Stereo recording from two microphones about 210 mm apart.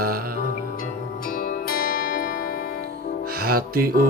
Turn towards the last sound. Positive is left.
turn(degrees=-45)  # may be behind; listen again after turning